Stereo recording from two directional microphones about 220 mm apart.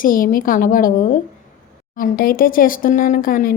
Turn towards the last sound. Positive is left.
turn(degrees=40)  # may be behind; listen again after turning